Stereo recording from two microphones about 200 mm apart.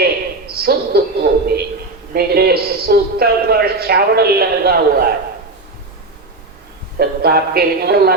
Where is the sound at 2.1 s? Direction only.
50° right (ahead or behind).